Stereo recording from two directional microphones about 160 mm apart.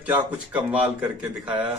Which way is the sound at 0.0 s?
10° right (ahead or behind).